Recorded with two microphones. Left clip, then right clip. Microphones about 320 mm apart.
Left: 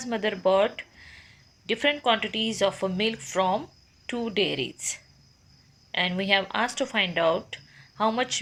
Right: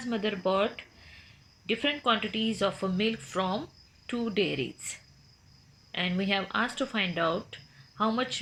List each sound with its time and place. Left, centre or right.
0.1 s speech: left